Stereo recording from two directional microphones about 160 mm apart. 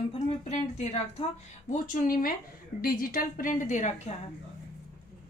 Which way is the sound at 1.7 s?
55° left (ahead or behind).